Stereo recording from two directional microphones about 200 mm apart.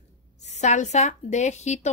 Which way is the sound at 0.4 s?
35° left (ahead or behind).